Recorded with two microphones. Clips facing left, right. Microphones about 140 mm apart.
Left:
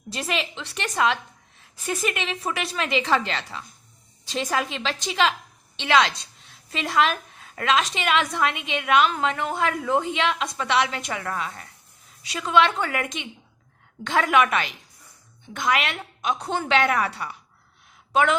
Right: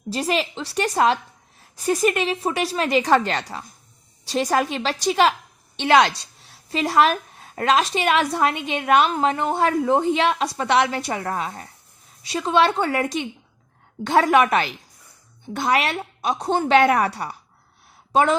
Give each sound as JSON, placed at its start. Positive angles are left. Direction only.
{"t": 0.1, "sound": "a woman's voice", "side_deg": -35}
{"t": 18.1, "sound": "a woman's voice", "side_deg": -35}